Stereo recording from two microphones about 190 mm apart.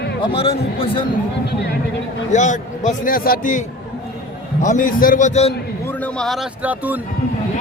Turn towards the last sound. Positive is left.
turn(degrees=-10)  # may be behind; listen again after turning